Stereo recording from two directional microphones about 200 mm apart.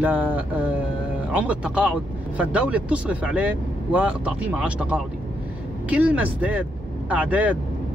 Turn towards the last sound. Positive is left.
turn(degrees=-5)  # may be behind; listen again after turning